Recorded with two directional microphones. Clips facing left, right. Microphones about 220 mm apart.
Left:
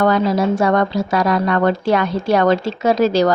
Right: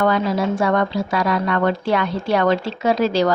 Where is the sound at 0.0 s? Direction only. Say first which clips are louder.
Left 3 dB; 40° left (ahead or behind).